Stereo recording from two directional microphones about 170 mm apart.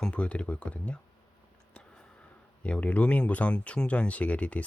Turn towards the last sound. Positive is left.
turn(degrees=5)  # may be behind; listen again after turning